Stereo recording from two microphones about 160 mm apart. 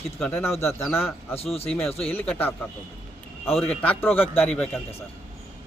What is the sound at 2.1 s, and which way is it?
Speech, 10° left (ahead or behind).